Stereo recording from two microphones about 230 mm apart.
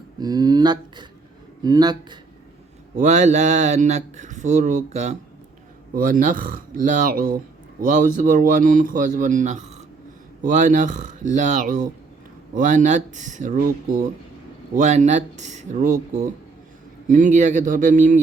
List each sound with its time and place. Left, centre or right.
0.2 s speech: centre
2.9 s speech: right